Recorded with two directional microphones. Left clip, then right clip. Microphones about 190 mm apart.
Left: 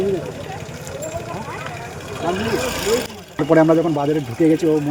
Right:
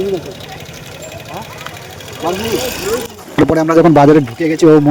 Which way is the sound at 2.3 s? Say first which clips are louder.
Right 4 dB; 60° right (ahead or behind).